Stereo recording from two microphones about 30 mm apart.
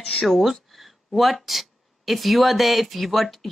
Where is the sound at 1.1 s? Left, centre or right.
Centre.